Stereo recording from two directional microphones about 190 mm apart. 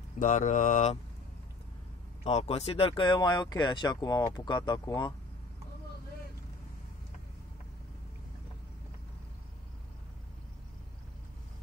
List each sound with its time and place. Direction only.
0.2 s mantra: 40° left (ahead or behind)
2.2 s speech: 35° left (ahead or behind)